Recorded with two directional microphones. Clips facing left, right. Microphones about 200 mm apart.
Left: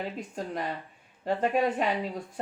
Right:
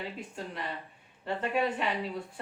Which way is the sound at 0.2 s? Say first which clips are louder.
Left 5 dB; 40° left (ahead or behind).